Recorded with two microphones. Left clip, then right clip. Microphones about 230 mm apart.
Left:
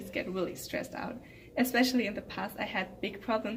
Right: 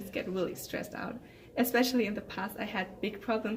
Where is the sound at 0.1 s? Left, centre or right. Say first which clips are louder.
Even; centre.